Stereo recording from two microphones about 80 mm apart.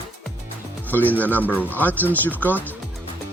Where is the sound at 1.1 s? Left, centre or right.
Left.